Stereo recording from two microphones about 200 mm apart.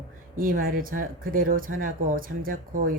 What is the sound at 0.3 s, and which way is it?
Speech, 45° right (ahead or behind).